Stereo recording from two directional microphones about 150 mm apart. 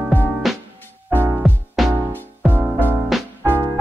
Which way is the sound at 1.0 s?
15° right (ahead or behind).